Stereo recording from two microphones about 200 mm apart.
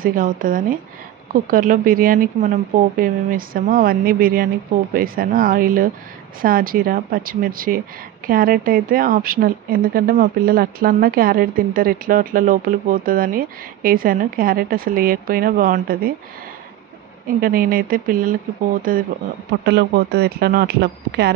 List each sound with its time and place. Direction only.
0.0 s speech: 45° right (ahead or behind)
17.4 s speech: 45° right (ahead or behind)
19.6 s speech: 55° right (ahead or behind)